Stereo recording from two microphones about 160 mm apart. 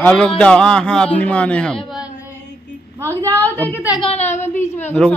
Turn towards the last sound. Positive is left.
turn(degrees=10)  # may be behind; listen again after turning